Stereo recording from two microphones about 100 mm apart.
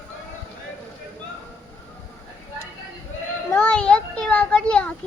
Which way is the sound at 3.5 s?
10° left (ahead or behind).